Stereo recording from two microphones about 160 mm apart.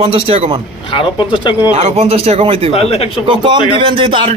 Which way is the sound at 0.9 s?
30° left (ahead or behind).